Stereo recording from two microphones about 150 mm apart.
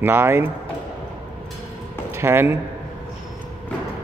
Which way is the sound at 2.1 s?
15° right (ahead or behind).